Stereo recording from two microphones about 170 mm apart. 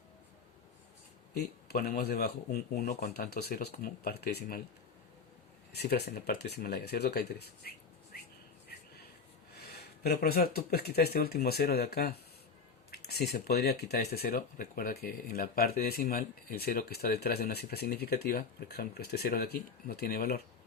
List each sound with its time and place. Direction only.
1.3 s speech: 70° left (ahead or behind)
5.7 s speech: 70° left (ahead or behind)
9.6 s speech: 70° left (ahead or behind)